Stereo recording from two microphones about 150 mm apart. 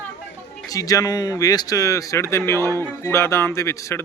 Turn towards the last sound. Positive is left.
turn(degrees=20)  # may be behind; listen again after turning